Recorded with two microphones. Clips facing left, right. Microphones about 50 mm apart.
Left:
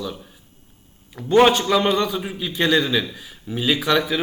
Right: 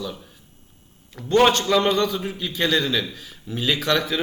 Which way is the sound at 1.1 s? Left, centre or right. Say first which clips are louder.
Left 2 dB; centre.